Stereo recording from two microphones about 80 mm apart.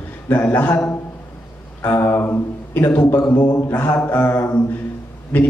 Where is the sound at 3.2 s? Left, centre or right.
Left.